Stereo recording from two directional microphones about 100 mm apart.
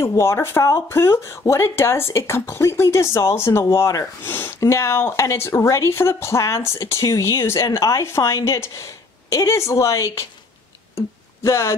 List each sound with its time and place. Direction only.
0.0 s speech: 25° left (ahead or behind)
11.4 s speech: 25° left (ahead or behind)